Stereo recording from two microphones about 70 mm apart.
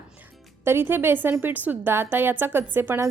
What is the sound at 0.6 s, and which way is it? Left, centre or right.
A woman's voice, right.